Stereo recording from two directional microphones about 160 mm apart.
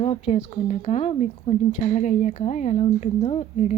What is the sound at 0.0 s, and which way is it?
Speech, 40° left (ahead or behind).